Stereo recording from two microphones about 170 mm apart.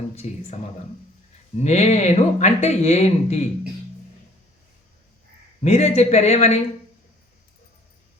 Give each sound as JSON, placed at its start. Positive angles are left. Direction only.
{"t": 0.2, "sound": "speech", "side_deg": 40}
{"t": 5.6, "sound": "speech", "side_deg": 40}